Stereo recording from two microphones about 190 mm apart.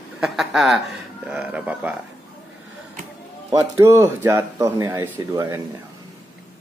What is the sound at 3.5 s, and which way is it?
Speech, 15° right (ahead or behind).